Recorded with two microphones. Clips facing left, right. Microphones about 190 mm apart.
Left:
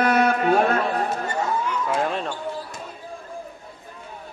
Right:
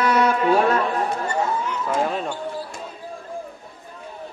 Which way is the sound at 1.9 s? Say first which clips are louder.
Right 3 dB; 5° right (ahead or behind).